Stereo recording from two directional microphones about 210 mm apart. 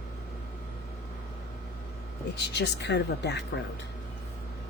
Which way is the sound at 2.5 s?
55° left (ahead or behind).